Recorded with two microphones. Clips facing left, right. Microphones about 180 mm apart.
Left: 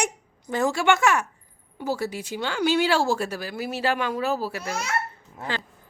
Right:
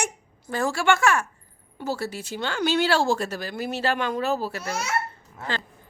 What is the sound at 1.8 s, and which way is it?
Speech, 15° left (ahead or behind).